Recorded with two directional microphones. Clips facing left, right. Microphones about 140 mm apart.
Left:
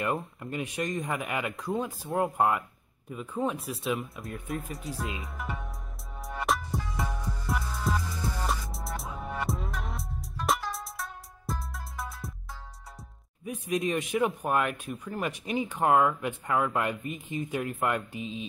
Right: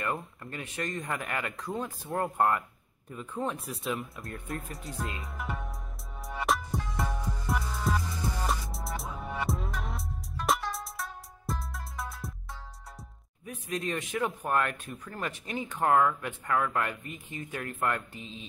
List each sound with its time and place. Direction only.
0.0 s speech: 20° left (ahead or behind); by 5.7 s centre (ahead or behind)
6.2 s music: centre (ahead or behind)
13.5 s speech: 15° left (ahead or behind)